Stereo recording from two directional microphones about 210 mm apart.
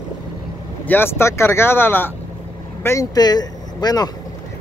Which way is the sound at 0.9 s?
10° left (ahead or behind).